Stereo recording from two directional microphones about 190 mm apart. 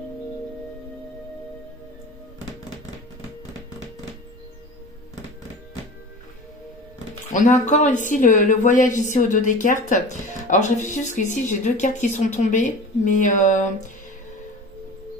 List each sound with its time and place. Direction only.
7.3 s speech: 40° left (ahead or behind)